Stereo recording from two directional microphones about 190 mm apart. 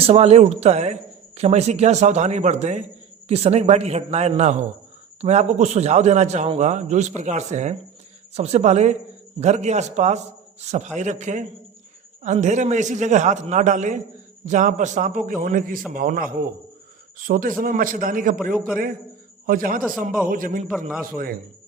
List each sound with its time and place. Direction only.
0.0 s a man's voice: 30° right (ahead or behind)
19.5 s a man's voice: 45° right (ahead or behind)